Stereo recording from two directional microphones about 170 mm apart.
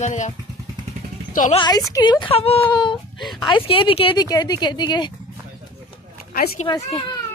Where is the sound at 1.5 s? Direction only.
25° left (ahead or behind).